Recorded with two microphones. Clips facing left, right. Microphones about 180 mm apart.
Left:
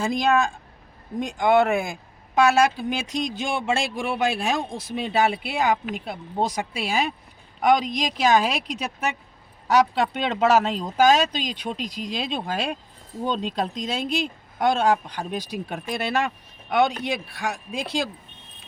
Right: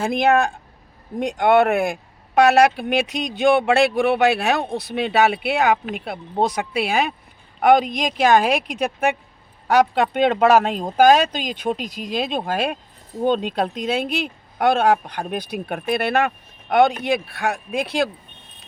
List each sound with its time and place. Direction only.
0.0 s speech: 60° right (ahead or behind)